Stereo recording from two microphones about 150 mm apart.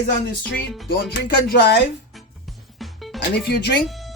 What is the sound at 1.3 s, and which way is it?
Speech, 90° left.